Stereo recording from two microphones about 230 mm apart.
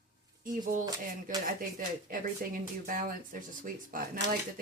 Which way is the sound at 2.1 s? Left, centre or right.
Right.